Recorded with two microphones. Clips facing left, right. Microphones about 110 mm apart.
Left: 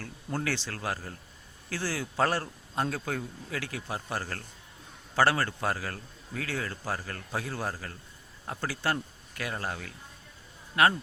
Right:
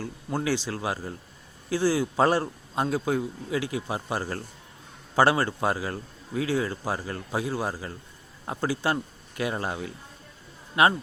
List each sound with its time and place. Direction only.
0.0 s a man's voice: 15° right (ahead or behind)